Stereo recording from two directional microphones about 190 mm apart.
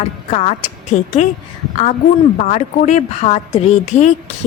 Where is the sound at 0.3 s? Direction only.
35° left (ahead or behind).